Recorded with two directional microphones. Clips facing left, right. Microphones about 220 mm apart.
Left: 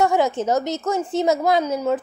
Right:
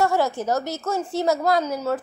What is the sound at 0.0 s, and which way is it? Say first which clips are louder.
A woman's voice: left 3 dB; 20° left (ahead or behind).